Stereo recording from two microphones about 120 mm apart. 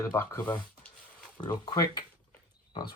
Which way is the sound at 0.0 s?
25° left (ahead or behind).